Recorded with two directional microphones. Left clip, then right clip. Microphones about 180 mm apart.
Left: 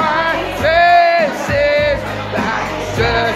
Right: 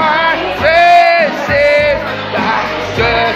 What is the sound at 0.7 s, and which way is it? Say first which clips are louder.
Music: right 3 dB; 15° left (ahead or behind).